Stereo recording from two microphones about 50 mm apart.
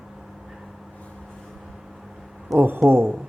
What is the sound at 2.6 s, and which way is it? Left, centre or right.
Speech, right.